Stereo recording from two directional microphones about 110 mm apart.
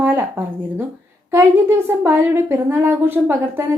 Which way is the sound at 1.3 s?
20° right (ahead or behind).